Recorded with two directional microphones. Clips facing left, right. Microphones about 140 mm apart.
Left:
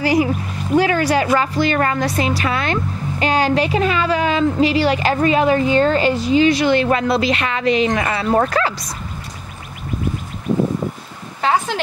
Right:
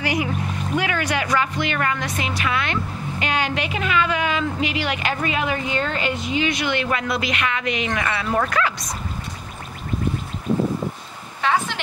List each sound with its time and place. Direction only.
0.0 s a woman's voice: 35° left (ahead or behind)